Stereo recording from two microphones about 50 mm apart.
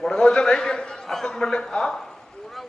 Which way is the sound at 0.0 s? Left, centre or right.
Centre.